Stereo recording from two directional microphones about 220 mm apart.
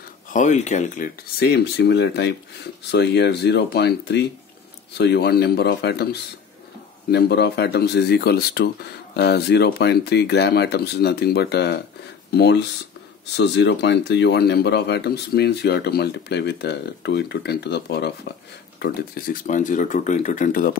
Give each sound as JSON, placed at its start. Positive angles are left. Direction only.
{"t": 0.3, "sound": "speech", "side_deg": 35}
{"t": 1.4, "sound": "speech", "side_deg": 50}
{"t": 7.1, "sound": "speech", "side_deg": 50}